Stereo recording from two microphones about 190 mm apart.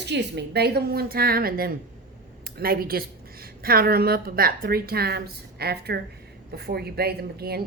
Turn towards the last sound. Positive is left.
turn(degrees=-55)  # may be behind; listen again after turning